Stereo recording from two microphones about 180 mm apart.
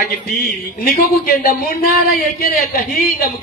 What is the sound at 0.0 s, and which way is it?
A man's voice, 50° left (ahead or behind).